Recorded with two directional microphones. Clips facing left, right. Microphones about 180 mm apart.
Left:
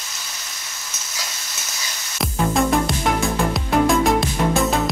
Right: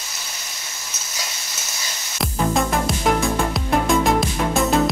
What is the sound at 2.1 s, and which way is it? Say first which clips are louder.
Music: left 1 dB; centre (ahead or behind).